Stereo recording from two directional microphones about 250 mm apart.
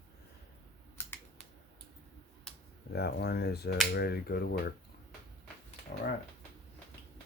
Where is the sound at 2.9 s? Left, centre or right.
Left.